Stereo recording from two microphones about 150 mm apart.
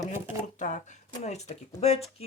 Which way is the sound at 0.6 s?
55° left (ahead or behind).